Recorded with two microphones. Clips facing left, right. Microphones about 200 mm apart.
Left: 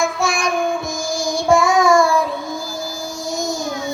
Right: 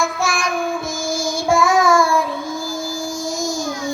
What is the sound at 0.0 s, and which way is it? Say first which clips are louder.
Child singing: left 2 dB; centre (ahead or behind).